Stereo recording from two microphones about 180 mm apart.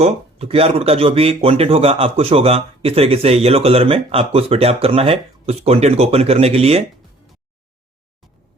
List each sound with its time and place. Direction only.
0.0 s speech: 35° right (ahead or behind)